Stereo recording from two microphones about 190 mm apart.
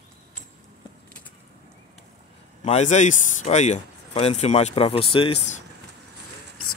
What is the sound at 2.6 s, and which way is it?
Speech, 35° left (ahead or behind).